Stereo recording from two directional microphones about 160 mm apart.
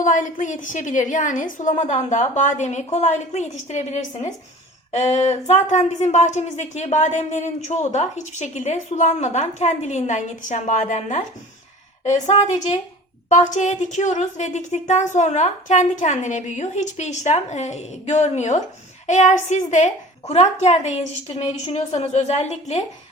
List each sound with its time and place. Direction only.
0.0 s speech: 55° left (ahead or behind)